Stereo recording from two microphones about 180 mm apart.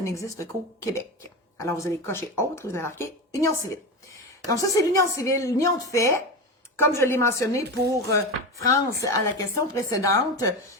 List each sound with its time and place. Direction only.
0.0 s a woman's voice: 15° left (ahead or behind)
1.5 s speech: 15° left (ahead or behind)